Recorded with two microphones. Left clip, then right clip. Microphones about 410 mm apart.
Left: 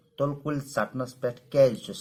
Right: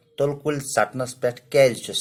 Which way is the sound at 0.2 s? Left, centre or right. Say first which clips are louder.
Right 6 dB; right.